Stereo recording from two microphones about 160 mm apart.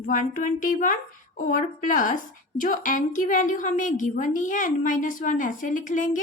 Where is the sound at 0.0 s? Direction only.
55° left (ahead or behind).